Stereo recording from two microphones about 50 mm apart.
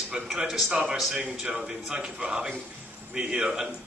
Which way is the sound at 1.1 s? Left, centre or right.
Right.